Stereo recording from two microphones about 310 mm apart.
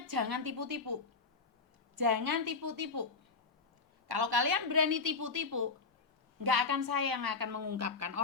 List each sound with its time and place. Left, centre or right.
0.1 s a woman's voice: right
2.0 s a woman's voice: right
4.4 s a woman's voice: right
6.4 s a woman's voice: right